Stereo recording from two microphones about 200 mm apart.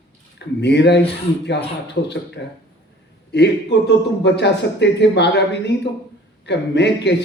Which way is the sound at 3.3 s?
60° left (ahead or behind).